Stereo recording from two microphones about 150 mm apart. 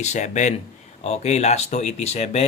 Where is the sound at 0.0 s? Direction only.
50° left (ahead or behind).